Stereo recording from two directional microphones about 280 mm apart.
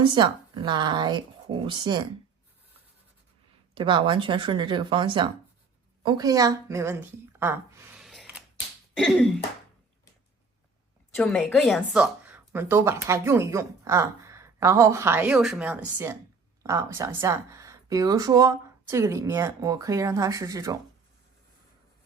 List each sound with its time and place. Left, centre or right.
0.0 s a woman's voice: centre
3.8 s a woman's voice: centre
9.0 s throat clearing: centre
11.2 s a woman's voice: centre